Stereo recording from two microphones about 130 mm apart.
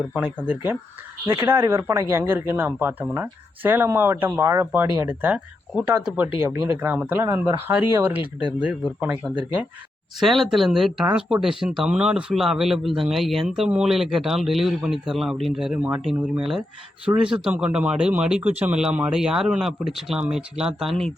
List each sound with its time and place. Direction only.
0.4 s speech: 15° right (ahead or behind)
9.2 s speech: 5° left (ahead or behind)